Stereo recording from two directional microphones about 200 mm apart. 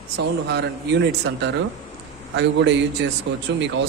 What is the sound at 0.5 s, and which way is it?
Speech, 55° right (ahead or behind).